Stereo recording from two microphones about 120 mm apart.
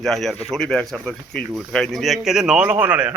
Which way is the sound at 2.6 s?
15° right (ahead or behind).